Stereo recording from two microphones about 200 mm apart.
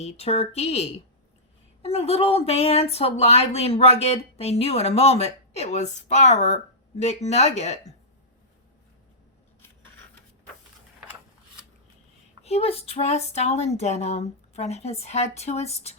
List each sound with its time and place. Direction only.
0.0 s a woman's voice: 30° left (ahead or behind)
9.6 s a sound: 10° left (ahead or behind)
12.4 s a woman's voice: 30° left (ahead or behind)